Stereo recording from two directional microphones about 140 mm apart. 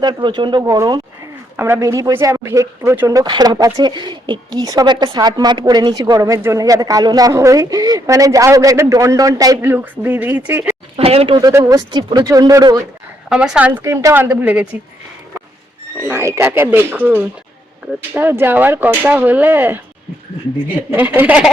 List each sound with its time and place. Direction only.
0.0 s speech: 30° right (ahead or behind)
1.5 s speech: 15° right (ahead or behind)
3.1 s speech: 30° right (ahead or behind)
9.6 s speech: 15° right (ahead or behind)
10.9 s speech: 45° right (ahead or behind)
11.3 s speech: 25° right (ahead or behind)
13.3 s speech: 5° right (ahead or behind)
16.0 s speech: 15° right (ahead or behind)
20.9 s speech: 15° right (ahead or behind)